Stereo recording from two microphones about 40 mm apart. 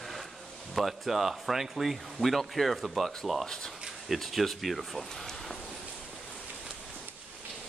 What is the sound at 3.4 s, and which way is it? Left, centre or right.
Speech, centre.